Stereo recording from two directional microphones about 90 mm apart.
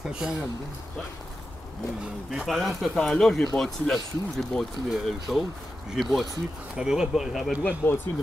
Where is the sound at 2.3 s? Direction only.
Centre (ahead or behind).